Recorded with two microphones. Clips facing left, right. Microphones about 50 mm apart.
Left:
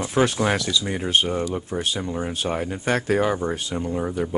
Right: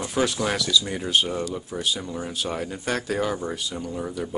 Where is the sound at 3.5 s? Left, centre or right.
Left.